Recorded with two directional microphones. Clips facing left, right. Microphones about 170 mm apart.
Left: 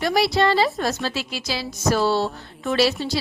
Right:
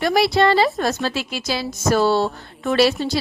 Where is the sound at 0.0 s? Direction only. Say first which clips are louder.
Right 3 dB; 55° right (ahead or behind).